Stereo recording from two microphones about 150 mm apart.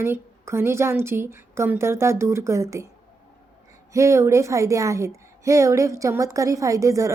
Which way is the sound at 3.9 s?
20° right (ahead or behind).